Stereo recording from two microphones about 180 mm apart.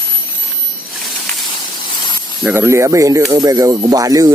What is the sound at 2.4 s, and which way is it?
Speech, 15° right (ahead or behind).